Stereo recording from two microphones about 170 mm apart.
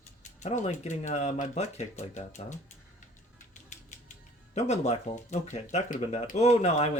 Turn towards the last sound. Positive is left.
turn(degrees=40)  # may be behind; listen again after turning